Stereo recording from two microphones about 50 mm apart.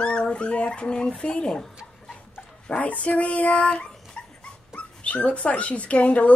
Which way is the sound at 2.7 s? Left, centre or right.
Left.